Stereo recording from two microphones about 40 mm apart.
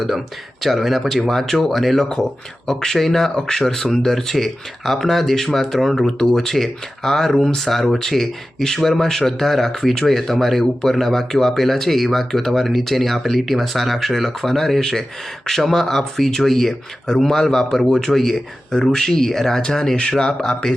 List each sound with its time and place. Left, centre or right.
0.6 s speech: centre; by 20.7 s left